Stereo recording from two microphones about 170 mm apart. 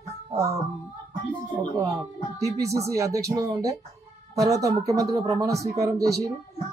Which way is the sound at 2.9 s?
20° right (ahead or behind).